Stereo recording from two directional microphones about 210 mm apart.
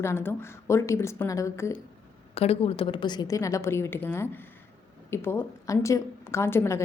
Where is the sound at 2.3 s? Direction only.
30° left (ahead or behind); by 6.8 s 10° left (ahead or behind).